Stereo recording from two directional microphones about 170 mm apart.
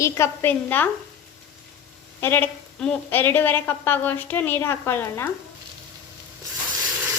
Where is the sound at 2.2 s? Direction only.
10° left (ahead or behind).